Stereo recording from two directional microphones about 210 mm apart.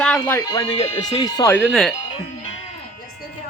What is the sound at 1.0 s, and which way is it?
Speech, 20° left (ahead or behind).